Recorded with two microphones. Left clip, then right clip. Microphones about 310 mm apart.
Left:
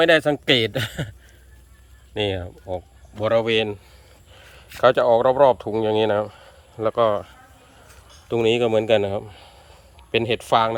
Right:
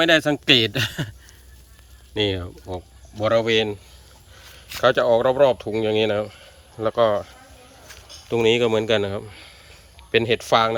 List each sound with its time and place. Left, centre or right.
0.0 s speech: centre
2.1 s speech: centre
4.8 s speech: centre